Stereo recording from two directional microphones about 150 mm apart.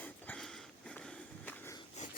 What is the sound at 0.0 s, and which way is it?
Walk, 10° left (ahead or behind).